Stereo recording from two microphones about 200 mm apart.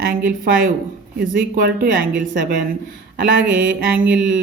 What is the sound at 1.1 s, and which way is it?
Speech, 55° right (ahead or behind).